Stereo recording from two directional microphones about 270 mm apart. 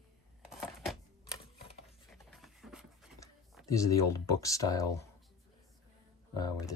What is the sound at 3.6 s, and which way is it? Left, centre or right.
Speech, centre.